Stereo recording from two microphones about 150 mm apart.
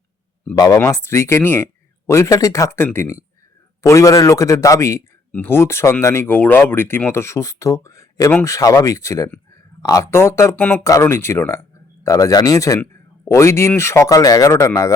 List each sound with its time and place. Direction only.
0.5 s speech: 20° left (ahead or behind)